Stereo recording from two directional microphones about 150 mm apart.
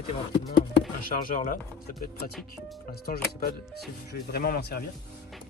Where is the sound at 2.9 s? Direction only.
80° left.